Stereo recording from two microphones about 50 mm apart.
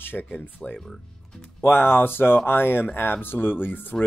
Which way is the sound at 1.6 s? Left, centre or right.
Left.